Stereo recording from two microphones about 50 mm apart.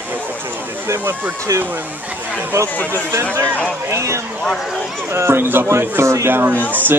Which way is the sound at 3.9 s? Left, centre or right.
Right.